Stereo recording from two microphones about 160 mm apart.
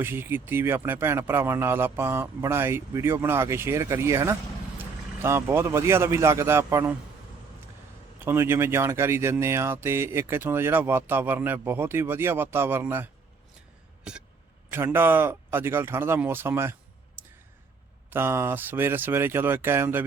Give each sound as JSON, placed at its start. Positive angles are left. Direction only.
{"t": 0.0, "sound": "speech", "side_deg": -15}
{"t": 8.2, "sound": "speech", "side_deg": -15}
{"t": 14.1, "sound": "vehicle", "side_deg": -5}
{"t": 14.7, "sound": "speech", "side_deg": -15}
{"t": 18.1, "sound": "speech", "side_deg": -15}